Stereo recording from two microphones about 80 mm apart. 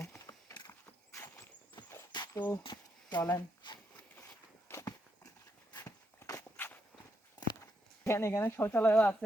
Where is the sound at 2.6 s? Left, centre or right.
Left.